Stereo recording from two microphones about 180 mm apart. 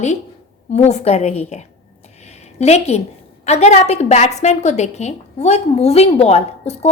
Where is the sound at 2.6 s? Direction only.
35° left (ahead or behind).